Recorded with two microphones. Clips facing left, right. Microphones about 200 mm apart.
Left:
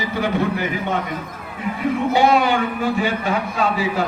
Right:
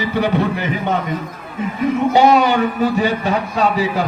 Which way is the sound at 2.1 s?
40° right (ahead or behind).